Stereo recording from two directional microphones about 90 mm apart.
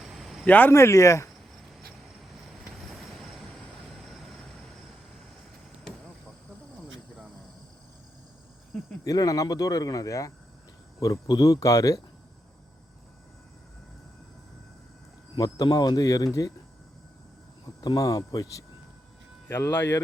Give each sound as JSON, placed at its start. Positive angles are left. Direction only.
{"t": 0.0, "sound": "a sound", "side_deg": 0}
{"t": 0.4, "sound": "speech", "side_deg": 20}
{"t": 0.7, "sound": "speech", "side_deg": 30}
{"t": 2.7, "sound": "train", "side_deg": 0}
{"t": 9.0, "sound": "speech", "side_deg": 40}
{"t": 11.6, "sound": "speech", "side_deg": 40}
{"t": 15.4, "sound": "speech", "side_deg": 45}
{"t": 17.7, "sound": "speech", "side_deg": 45}
{"t": 19.5, "sound": "speech", "side_deg": 25}